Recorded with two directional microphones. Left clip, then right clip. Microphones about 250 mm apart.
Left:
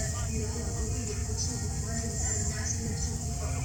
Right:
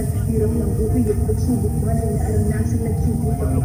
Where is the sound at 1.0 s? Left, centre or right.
Right.